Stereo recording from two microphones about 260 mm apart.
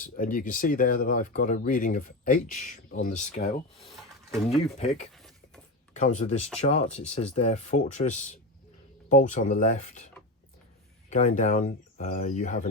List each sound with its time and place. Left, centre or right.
0.0 s speech: left
11.1 s speech: left